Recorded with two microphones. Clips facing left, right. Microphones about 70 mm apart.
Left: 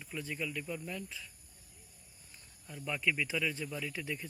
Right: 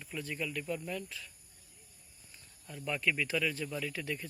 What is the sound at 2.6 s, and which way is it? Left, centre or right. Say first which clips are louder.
Speech: right 1 dB; centre.